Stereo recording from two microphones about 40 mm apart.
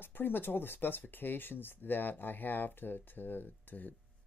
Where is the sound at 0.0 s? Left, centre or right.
Left.